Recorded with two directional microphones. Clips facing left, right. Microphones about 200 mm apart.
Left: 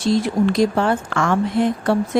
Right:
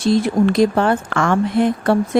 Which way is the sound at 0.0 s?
55° right (ahead or behind).